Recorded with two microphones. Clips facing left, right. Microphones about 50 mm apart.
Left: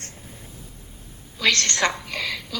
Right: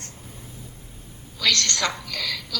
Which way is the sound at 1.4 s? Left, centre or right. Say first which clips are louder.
Left 2 dB; left.